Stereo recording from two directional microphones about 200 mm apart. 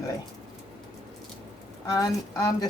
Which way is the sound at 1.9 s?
20° left (ahead or behind).